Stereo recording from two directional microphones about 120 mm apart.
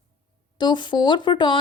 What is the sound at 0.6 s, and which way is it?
A woman's voice, 40° left (ahead or behind).